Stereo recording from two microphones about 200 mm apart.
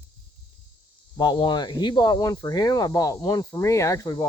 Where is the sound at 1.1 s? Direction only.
20° left (ahead or behind).